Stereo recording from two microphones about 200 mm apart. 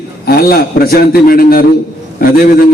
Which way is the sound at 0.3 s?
50° left (ahead or behind).